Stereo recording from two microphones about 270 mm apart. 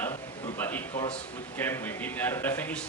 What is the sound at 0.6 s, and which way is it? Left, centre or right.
A man's voice, centre.